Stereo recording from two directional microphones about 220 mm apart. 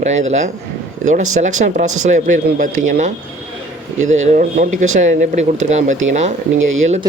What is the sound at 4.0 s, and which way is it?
Speech, 30° right (ahead or behind).